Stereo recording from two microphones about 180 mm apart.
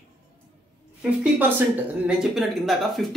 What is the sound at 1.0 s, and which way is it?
A woman's voice, 10° right (ahead or behind).